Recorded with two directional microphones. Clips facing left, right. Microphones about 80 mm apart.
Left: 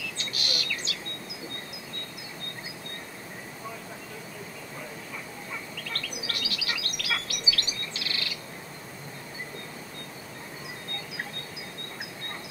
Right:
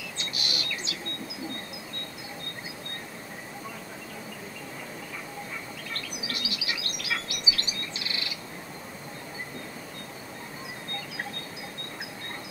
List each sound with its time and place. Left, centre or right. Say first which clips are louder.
0.2 s bird: right 1 dB; right
5.9 s chirp: left 1 dB; right